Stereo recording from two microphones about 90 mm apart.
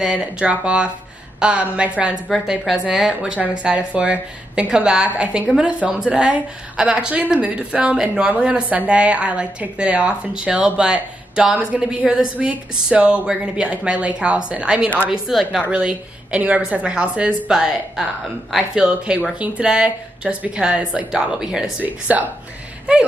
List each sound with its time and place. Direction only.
0.0 s a woman's voice: 10° right (ahead or behind)
2.2 s a woman's voice: centre (ahead or behind)
18.8 s a woman's voice: 15° right (ahead or behind)
21.8 s a woman's voice: 15° right (ahead or behind)